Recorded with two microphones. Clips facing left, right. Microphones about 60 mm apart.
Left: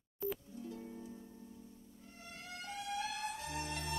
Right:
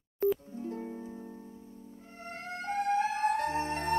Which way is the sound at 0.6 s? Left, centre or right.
Right.